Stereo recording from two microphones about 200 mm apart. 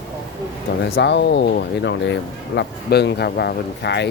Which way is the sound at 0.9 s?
60° left (ahead or behind).